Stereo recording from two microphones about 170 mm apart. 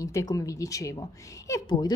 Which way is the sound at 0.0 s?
20° left (ahead or behind).